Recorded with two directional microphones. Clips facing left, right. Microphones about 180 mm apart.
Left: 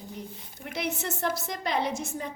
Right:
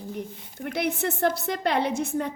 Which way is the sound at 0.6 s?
55° right (ahead or behind).